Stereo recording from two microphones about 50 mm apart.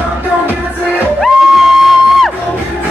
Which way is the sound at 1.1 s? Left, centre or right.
Centre.